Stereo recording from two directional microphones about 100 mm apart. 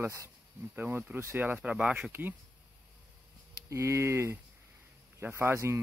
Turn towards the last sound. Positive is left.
turn(degrees=-25)  # may be behind; listen again after turning